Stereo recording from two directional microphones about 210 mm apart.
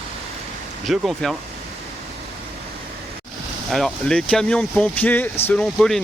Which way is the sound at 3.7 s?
Centre (ahead or behind).